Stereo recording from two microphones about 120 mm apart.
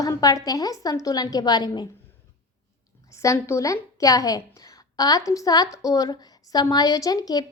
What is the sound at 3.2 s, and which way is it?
A child's voice, 25° left (ahead or behind).